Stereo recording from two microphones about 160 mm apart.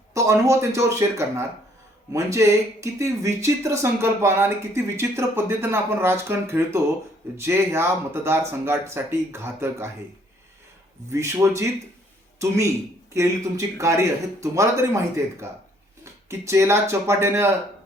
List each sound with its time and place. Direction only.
0.1 s speech: 20° right (ahead or behind)
11.1 s speech: 20° right (ahead or behind)